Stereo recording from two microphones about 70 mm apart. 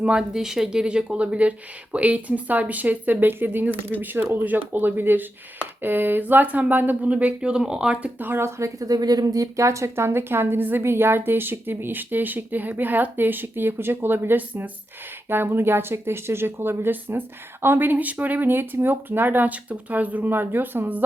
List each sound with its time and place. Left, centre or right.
0.0 s speech: centre
8.2 s speech: right